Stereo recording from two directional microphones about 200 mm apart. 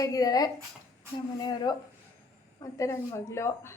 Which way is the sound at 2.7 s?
15° left (ahead or behind).